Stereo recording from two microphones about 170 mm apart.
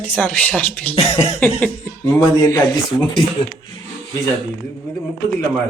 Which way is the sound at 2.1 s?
20° left (ahead or behind).